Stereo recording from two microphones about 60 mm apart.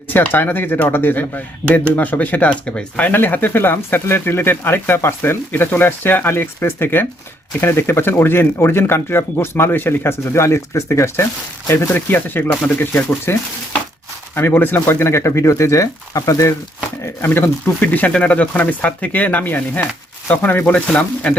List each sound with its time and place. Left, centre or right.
0.4 s speech: left
3.1 s speech: left
11.9 s speech: left
14.3 s speech: left
17.2 s speech: left
17.8 s speech: left